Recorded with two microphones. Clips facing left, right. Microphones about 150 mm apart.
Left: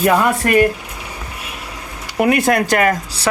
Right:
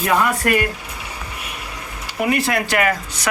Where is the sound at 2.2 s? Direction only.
50° left (ahead or behind).